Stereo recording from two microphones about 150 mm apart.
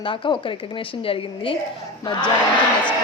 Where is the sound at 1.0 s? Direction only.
35° left (ahead or behind).